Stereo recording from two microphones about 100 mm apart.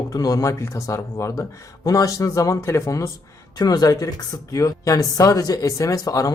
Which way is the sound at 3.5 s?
40° left (ahead or behind).